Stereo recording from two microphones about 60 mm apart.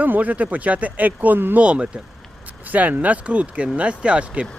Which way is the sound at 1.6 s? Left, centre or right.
Centre.